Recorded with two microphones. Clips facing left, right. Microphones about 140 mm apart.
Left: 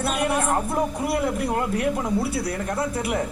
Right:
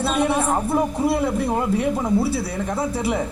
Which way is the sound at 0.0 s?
25° right (ahead or behind).